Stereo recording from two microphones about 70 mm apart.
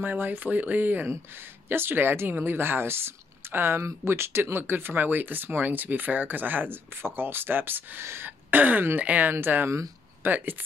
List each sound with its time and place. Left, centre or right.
0.0 s speech: right